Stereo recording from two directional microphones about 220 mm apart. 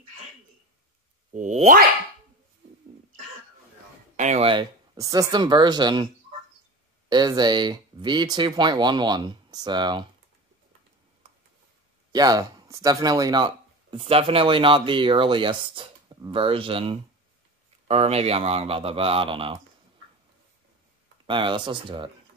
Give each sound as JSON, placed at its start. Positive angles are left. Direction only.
{"t": 1.3, "sound": "speech", "side_deg": -30}
{"t": 4.2, "sound": "speech", "side_deg": -30}
{"t": 7.1, "sound": "speech", "side_deg": -20}
{"t": 12.1, "sound": "speech", "side_deg": -15}
{"t": 21.3, "sound": "speech", "side_deg": -20}